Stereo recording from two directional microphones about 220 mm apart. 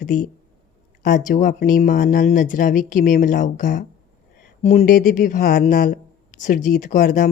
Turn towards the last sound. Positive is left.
turn(degrees=40)  # may be behind; listen again after turning